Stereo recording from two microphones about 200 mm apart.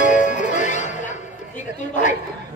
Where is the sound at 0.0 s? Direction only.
40° left (ahead or behind).